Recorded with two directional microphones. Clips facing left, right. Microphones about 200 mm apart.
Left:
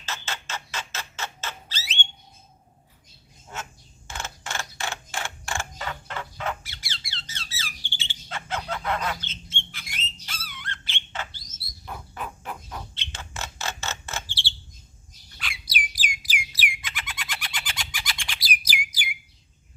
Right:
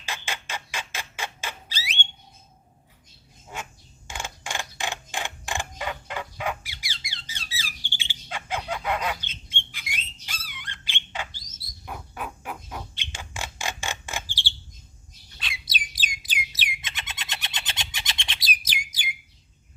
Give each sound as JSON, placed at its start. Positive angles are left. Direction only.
{"t": 0.0, "sound": "squawk", "side_deg": -15}
{"t": 3.5, "sound": "a sound", "side_deg": -15}
{"t": 7.1, "sound": "bird", "side_deg": -15}